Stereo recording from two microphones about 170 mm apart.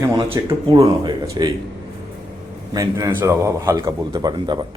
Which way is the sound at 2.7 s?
20° right (ahead or behind).